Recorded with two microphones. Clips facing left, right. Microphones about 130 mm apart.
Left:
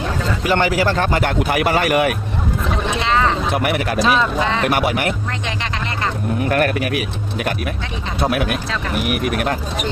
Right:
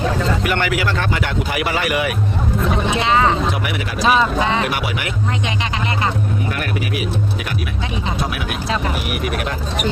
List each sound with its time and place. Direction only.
0.4 s speech: 30° left (ahead or behind); by 2.1 s 45° left (ahead or behind)
2.6 s speech: centre (ahead or behind)
3.5 s speech: 50° left (ahead or behind)
4.0 s speech: 5° right (ahead or behind)
4.6 s speech: 50° left (ahead or behind)
6.5 s speech: 50° left (ahead or behind)
8.3 s speech: 50° left (ahead or behind)